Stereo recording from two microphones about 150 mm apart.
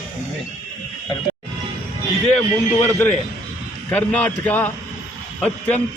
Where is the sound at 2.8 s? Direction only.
15° left (ahead or behind).